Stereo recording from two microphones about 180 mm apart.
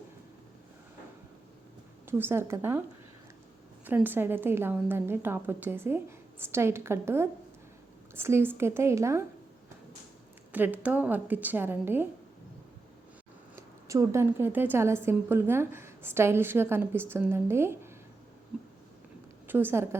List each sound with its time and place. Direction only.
2.0 s a woman's voice: 15° right (ahead or behind)
3.8 s a woman's voice: 10° right (ahead or behind)
10.5 s a woman's voice: 10° right (ahead or behind)
13.6 s a woman's voice: 15° right (ahead or behind)
19.5 s a woman's voice: 10° right (ahead or behind)